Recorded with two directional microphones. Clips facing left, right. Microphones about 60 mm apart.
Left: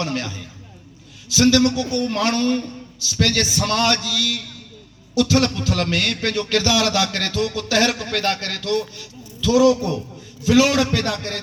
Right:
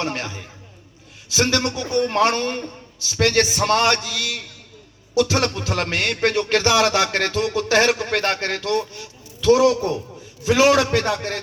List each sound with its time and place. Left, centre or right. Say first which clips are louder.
0.0 s a man's voice: left 1 dB; right